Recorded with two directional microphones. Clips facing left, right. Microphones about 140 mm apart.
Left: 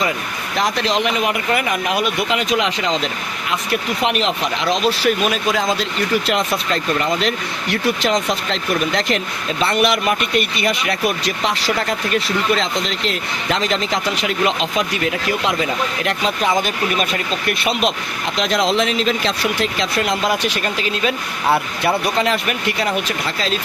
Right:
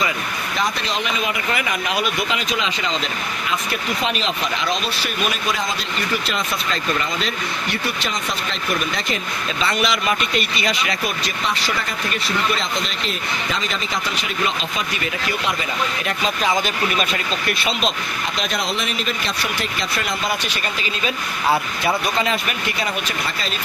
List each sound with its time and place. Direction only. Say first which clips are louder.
0.6 s speech: left 6 dB; 90° left
1.5 s speech: left 4 dB; 55° left (ahead or behind)
4.0 s speech: left 4 dB; 65° left (ahead or behind); by 5.6 s 90° left
7.0 s speech: left 5 dB; 75° left (ahead or behind)
18.3 s speech: left 9 dB; 90° left; by 21.1 s 70° left (ahead or behind)
21.5 s speech: left 3 dB; 60° left (ahead or behind); by 23.5 s 80° left